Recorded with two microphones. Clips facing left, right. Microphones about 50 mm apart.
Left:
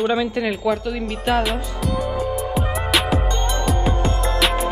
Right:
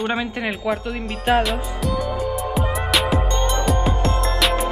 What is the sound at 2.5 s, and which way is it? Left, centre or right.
Music, centre.